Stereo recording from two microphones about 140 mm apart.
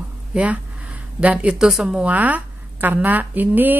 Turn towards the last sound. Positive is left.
turn(degrees=-15)  # may be behind; listen again after turning